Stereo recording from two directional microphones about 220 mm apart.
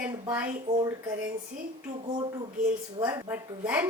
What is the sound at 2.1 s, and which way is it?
A woman's voice, 20° right (ahead or behind).